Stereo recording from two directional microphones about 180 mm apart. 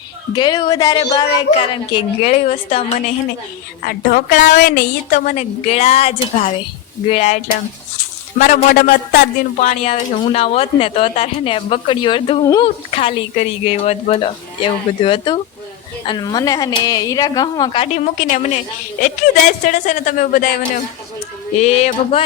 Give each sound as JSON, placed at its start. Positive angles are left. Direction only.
{"t": 0.3, "sound": "a woman's voice", "side_deg": 25}
{"t": 2.3, "sound": "a woman's voice", "side_deg": 40}
{"t": 3.8, "sound": "speech", "side_deg": 55}
{"t": 4.5, "sound": "a woman's voice", "side_deg": 60}
{"t": 8.4, "sound": "speech", "side_deg": 45}
{"t": 9.6, "sound": "a woman's voice", "side_deg": 40}
{"t": 17.9, "sound": "a woman's voice", "side_deg": 45}
{"t": 21.6, "sound": "a woman's voice", "side_deg": 35}